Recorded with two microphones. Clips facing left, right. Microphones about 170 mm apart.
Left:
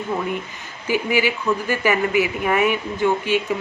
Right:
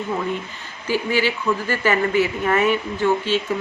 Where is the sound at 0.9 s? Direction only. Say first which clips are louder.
Left 1 dB; 15° left (ahead or behind).